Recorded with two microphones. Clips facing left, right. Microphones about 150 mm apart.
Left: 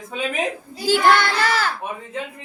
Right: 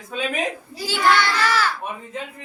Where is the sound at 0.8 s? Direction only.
45° left (ahead or behind).